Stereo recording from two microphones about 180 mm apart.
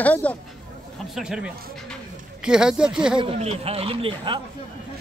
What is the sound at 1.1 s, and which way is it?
Speech, 5° right (ahead or behind).